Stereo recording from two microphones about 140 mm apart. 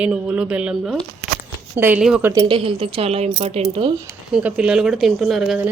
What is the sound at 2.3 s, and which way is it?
A woman's voice, 35° right (ahead or behind).